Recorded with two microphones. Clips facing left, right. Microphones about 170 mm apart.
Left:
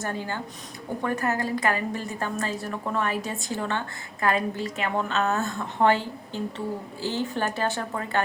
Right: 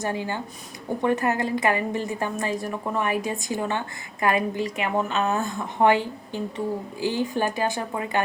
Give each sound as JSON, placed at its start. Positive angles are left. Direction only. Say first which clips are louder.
{"t": 0.0, "sound": "a woman's voice", "louder": "right 3 dB", "side_deg": -15}